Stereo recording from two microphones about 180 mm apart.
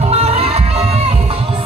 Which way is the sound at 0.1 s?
35° right (ahead or behind).